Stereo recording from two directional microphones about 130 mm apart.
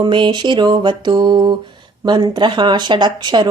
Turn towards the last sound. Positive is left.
turn(degrees=-35)  # may be behind; listen again after turning